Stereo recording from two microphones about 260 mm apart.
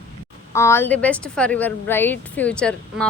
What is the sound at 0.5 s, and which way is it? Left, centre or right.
A woman's voice, centre.